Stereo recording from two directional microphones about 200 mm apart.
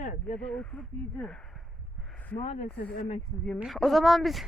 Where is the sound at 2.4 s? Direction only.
35° left (ahead or behind).